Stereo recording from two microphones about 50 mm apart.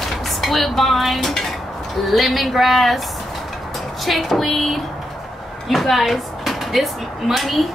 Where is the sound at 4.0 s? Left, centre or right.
Centre.